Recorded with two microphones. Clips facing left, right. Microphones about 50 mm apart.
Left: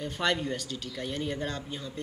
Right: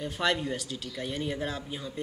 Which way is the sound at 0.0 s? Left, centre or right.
Centre.